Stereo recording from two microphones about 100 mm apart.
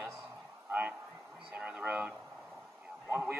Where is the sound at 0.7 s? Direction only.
15° right (ahead or behind).